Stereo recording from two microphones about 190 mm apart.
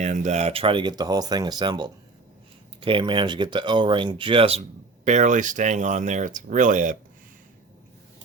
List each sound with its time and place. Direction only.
0.0 s speech: 40° right (ahead or behind)